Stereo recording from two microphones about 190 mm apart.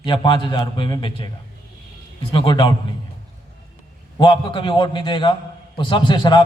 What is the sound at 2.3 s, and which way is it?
Speech, 25° left (ahead or behind).